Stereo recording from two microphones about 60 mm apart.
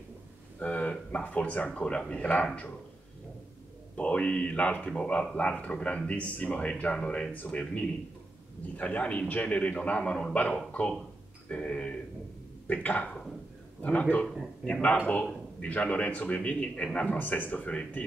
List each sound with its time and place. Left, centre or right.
0.6 s speech: left
3.9 s speech: left